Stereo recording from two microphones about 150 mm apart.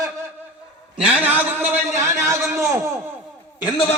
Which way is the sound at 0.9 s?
5° right (ahead or behind).